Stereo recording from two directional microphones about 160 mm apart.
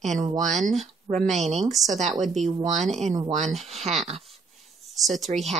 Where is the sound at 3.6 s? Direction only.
40° right (ahead or behind).